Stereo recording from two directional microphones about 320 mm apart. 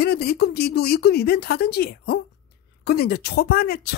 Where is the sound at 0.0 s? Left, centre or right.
Left.